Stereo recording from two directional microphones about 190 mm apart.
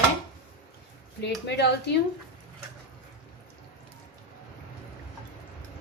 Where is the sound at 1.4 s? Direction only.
60° left (ahead or behind).